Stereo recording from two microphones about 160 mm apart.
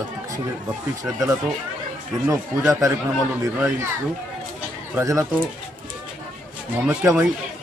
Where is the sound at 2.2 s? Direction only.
20° right (ahead or behind).